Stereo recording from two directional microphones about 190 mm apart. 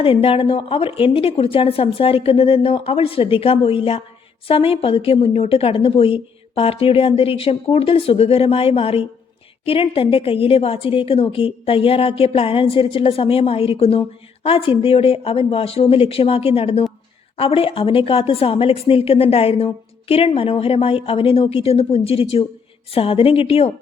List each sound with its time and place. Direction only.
0.0 s a woman's voice: 30° left (ahead or behind)